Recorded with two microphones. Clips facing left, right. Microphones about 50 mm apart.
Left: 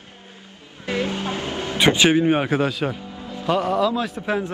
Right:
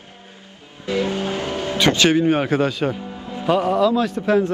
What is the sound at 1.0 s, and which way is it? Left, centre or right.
Music, right.